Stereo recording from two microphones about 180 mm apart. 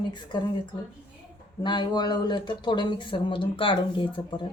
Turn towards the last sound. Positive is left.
turn(degrees=25)  # may be behind; listen again after turning